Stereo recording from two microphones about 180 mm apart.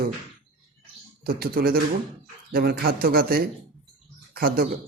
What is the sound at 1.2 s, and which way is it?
A man's voice, 55° right (ahead or behind).